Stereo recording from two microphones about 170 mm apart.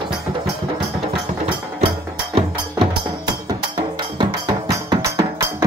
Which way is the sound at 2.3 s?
30° right (ahead or behind).